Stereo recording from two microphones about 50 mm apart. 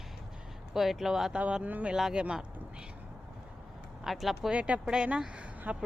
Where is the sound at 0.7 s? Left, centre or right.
Centre.